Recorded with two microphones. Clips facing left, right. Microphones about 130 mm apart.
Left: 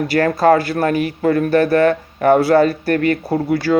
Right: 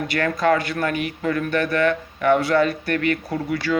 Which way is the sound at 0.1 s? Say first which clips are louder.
Left 6 dB; 35° left (ahead or behind).